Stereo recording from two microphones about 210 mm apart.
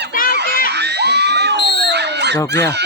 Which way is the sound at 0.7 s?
55° right (ahead or behind).